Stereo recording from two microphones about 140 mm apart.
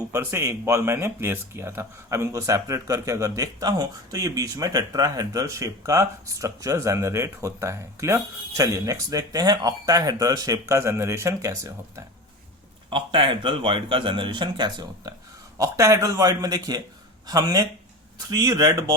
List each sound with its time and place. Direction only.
0.1 s speech: 20° right (ahead or behind)
12.9 s speech: 35° right (ahead or behind)